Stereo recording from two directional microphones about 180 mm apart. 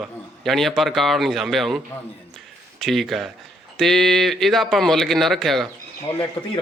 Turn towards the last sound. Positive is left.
turn(degrees=20)  # may be behind; listen again after turning